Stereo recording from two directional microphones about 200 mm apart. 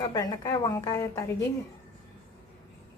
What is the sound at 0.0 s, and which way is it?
A woman's voice, 20° left (ahead or behind).